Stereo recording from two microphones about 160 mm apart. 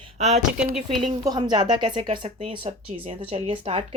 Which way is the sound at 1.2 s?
25° right (ahead or behind).